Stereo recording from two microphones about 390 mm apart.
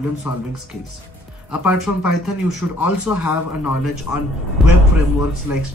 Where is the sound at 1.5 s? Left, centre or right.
Centre.